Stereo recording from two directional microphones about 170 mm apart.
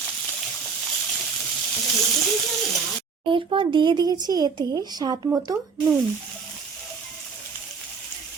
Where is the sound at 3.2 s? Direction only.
30° right (ahead or behind).